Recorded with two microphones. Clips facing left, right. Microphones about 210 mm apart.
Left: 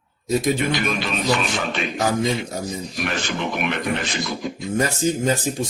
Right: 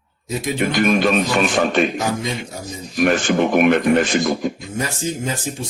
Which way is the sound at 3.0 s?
50° right (ahead or behind).